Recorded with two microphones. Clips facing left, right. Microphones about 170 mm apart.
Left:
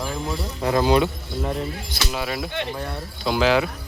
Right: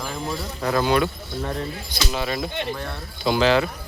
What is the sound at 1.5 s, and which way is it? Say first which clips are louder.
Speech: left 3 dB; 5° left (ahead or behind).